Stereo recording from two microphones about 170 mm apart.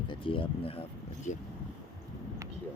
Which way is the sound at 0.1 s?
30° left (ahead or behind).